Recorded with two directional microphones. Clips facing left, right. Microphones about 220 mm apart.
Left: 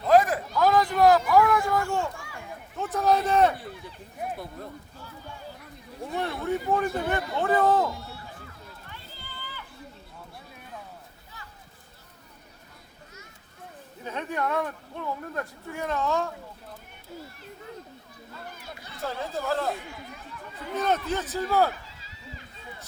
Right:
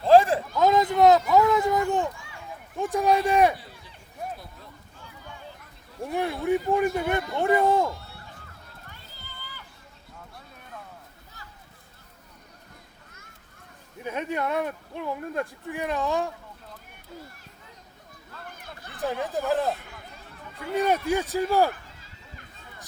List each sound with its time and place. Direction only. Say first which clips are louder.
0.0 s a sound: right 3 dB; 30° right (ahead or behind)
2.7 s a man's voice: right 2 dB; 15° right (ahead or behind)
4.4 s speech: left 8 dB; 50° left (ahead or behind)
6.1 s speech: right 4 dB; 15° right (ahead or behind)
14.0 s speech: right 2 dB; 10° right (ahead or behind)
18.6 s a sound: left 1 dB; 50° right (ahead or behind)
18.9 s speech: right 4 dB; 15° right (ahead or behind)
21.7 s run: right 1 dB; 55° right (ahead or behind)